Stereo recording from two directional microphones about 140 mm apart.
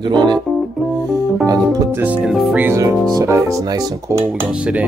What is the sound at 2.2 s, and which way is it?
Speech, 5° right (ahead or behind).